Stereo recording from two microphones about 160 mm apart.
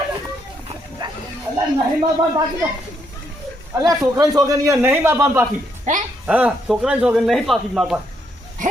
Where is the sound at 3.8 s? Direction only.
20° right (ahead or behind).